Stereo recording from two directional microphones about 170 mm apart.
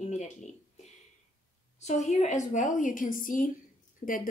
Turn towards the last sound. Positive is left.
turn(degrees=55)  # may be behind; listen again after turning